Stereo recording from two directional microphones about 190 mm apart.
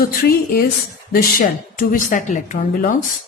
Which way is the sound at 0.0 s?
50° left (ahead or behind).